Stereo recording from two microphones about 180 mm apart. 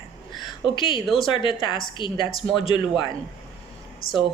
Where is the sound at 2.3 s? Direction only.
Centre (ahead or behind).